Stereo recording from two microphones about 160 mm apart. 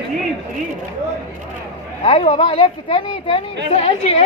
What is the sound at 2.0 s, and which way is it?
A woman's voice, 35° left (ahead or behind).